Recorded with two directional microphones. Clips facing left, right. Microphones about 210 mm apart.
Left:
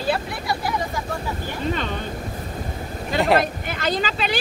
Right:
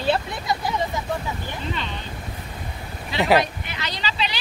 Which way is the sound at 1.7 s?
50° left (ahead or behind).